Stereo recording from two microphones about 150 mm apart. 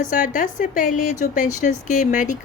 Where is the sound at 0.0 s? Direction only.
60° left (ahead or behind).